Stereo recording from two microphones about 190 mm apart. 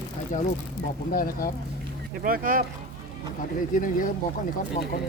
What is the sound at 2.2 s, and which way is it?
Speech, 45° right (ahead or behind).